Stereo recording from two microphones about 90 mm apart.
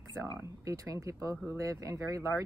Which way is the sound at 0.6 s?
40° right (ahead or behind).